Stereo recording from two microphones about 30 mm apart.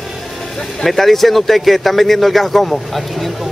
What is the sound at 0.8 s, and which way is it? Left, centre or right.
A man's voice, centre.